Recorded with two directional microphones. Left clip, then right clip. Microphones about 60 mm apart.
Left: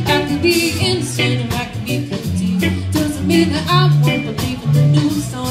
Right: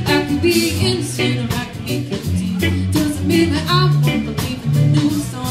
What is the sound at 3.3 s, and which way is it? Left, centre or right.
Music, left.